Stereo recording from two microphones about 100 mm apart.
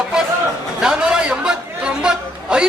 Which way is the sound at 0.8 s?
5° right (ahead or behind).